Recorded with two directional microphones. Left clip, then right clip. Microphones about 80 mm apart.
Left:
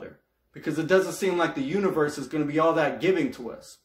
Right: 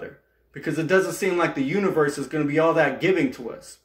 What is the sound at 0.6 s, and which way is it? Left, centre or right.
Speech, left.